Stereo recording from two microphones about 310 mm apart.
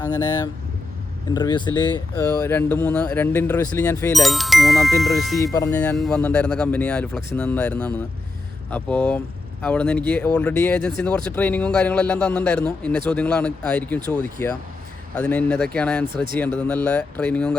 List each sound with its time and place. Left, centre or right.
0.0 s speech: centre
14.2 s speech: right
15.1 s speech: centre
16.0 s speech: centre
16.4 s speech: centre